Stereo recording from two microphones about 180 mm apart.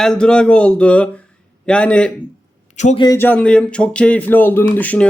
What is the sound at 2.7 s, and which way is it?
Speech, 40° left (ahead or behind).